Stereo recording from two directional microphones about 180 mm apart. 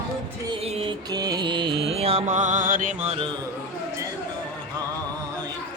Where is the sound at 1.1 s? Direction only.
20° right (ahead or behind).